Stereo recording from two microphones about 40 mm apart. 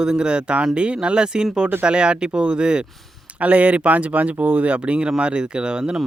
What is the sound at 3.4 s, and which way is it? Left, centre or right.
Speech, right.